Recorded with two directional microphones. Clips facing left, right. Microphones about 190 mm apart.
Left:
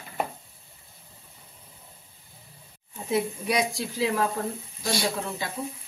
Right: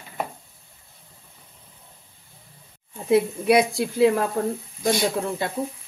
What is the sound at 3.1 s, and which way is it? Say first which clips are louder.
A woman's voice: right 8 dB; 60° right (ahead or behind).